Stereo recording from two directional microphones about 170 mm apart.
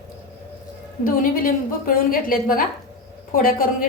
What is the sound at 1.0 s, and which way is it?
A woman's voice, 55° left (ahead or behind).